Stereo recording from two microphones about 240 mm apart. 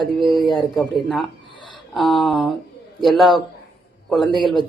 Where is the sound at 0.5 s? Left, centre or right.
Centre.